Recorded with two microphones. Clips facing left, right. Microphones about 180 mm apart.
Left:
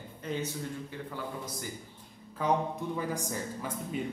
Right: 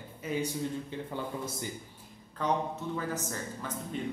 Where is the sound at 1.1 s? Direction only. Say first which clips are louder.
Right 3 dB; 25° right (ahead or behind).